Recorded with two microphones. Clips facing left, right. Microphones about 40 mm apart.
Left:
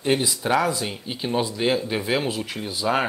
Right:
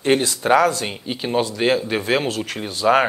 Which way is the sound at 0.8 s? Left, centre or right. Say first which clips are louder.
Right 3 dB; right.